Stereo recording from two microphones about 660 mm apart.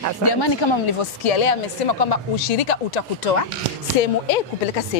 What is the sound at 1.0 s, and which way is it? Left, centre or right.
A woman's voice, left.